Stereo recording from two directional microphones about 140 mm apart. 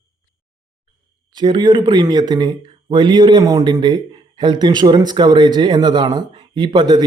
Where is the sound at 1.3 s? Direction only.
35° right (ahead or behind).